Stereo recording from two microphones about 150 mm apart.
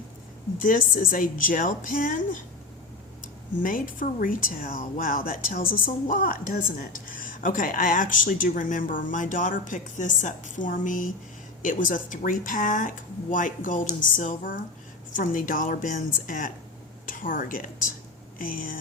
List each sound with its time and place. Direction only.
0.6 s a woman's voice: 65° left (ahead or behind)
3.6 s a woman's voice: 65° left (ahead or behind)